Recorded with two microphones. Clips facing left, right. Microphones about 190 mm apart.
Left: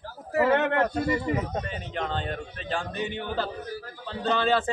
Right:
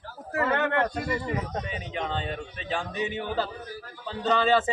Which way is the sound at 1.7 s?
Centre (ahead or behind).